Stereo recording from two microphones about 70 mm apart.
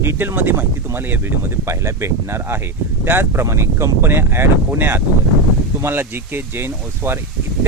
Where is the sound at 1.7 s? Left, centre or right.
Right.